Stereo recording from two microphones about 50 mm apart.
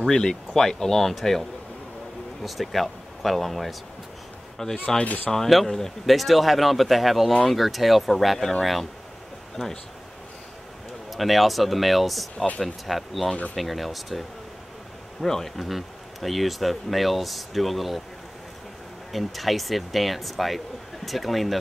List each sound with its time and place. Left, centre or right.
0.0 s speech: centre
5.0 s speech: left
5.3 s speech: centre
11.1 s speech: centre
15.2 s speech: centre
19.1 s speech: centre